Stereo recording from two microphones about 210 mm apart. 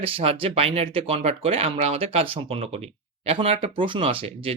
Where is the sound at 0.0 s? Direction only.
25° right (ahead or behind).